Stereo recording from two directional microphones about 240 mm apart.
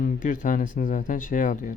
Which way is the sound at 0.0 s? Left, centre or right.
Left.